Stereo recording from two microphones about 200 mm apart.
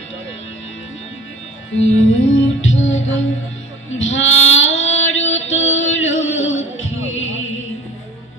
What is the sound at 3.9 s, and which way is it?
Female singing, 75° left (ahead or behind).